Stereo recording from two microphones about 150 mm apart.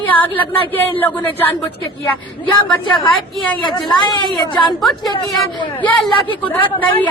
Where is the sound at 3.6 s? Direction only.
30° left (ahead or behind).